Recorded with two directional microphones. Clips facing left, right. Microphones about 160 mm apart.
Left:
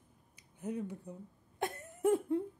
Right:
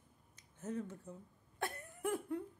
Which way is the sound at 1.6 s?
25° left (ahead or behind).